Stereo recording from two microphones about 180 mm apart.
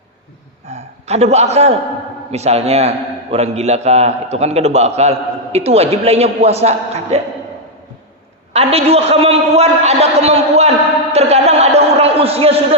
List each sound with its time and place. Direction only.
0.7 s a man's voice: 35° right (ahead or behind)
8.5 s a man's voice: 35° right (ahead or behind)
11.1 s a sound: 35° right (ahead or behind)